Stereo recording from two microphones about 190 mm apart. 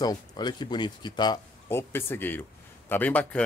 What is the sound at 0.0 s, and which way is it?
Speech, 20° left (ahead or behind).